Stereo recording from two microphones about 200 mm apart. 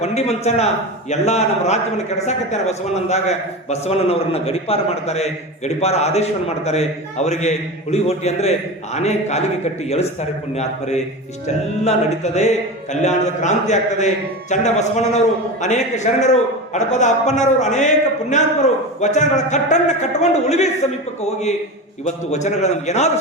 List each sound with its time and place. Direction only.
0.0 s a man's voice: 35° left (ahead or behind)